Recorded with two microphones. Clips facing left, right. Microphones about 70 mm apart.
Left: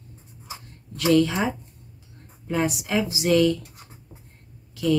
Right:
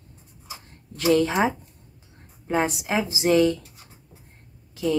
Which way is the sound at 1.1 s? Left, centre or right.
Right.